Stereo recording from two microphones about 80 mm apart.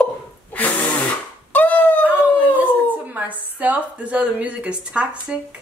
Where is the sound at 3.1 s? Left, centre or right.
Centre.